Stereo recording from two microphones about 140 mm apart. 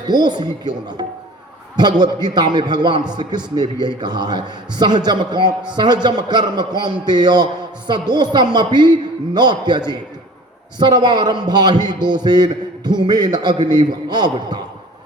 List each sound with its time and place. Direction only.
0.1 s a man's voice: 30° right (ahead or behind)